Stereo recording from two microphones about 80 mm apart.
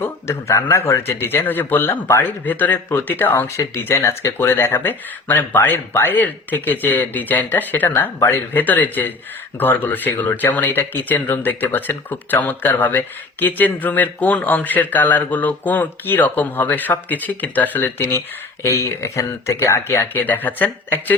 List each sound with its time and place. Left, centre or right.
0.0 s speech: left
2.0 s speech: left
2.4 s speech: left
20.1 s speech: left